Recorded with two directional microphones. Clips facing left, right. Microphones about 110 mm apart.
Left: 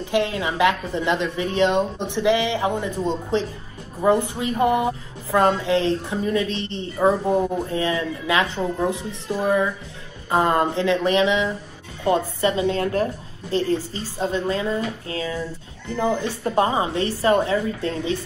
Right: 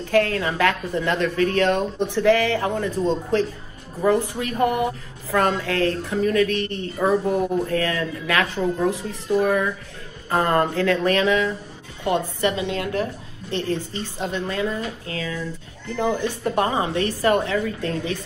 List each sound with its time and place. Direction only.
0.1 s speech: 15° left (ahead or behind)
12.0 s speech: 30° left (ahead or behind)